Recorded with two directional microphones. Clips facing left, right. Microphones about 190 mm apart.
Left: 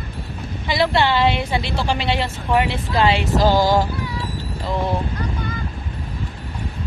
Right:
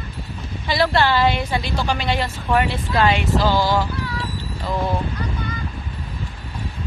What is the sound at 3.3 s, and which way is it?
Fowl, 45° left (ahead or behind).